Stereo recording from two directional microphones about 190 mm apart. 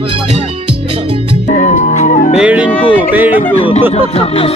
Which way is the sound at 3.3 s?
30° left (ahead or behind).